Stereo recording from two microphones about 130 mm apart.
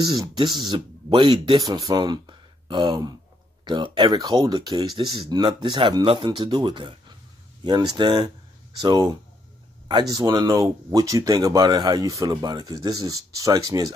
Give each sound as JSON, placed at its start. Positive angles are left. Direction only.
{"t": 0.0, "sound": "speech", "side_deg": -35}